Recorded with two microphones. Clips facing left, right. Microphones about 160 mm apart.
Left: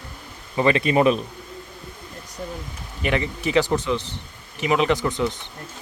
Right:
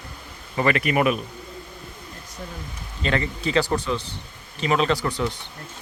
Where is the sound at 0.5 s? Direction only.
20° left (ahead or behind).